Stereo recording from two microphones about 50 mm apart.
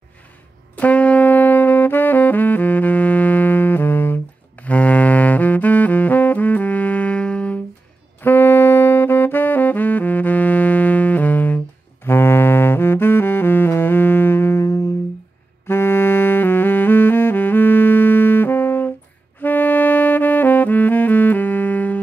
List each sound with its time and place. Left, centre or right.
0.7 s saxophone: left
4.6 s saxophone: left
8.2 s saxophone: left
12.0 s saxophone: left
15.6 s saxophone: left